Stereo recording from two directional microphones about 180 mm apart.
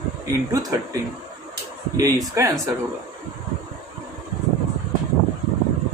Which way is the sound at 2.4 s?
15° right (ahead or behind).